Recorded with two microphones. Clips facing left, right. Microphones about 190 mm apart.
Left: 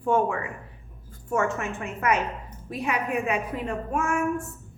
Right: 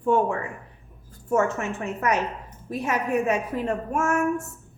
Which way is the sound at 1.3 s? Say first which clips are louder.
Right 3 dB; 40° right (ahead or behind).